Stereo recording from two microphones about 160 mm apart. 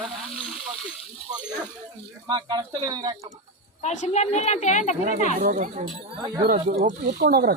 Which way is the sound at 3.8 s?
45° left (ahead or behind).